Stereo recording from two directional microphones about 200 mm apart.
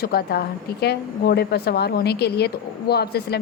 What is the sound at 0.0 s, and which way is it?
A woman's voice, 50° left (ahead or behind).